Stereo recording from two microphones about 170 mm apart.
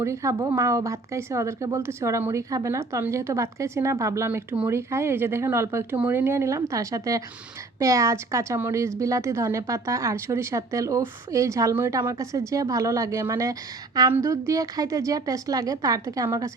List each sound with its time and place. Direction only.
0.0 s a woman's voice: 15° right (ahead or behind)